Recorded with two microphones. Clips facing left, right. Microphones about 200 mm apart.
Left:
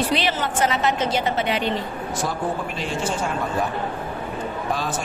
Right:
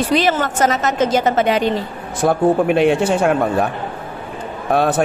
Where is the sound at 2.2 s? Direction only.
60° right (ahead or behind).